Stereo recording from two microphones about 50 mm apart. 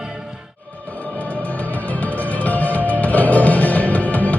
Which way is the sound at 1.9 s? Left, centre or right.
Left.